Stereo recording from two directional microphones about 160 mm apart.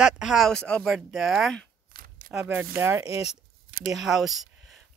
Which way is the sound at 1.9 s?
60° right (ahead or behind).